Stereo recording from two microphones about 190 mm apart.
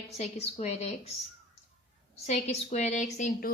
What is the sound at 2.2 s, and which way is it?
A woman's voice, 35° left (ahead or behind).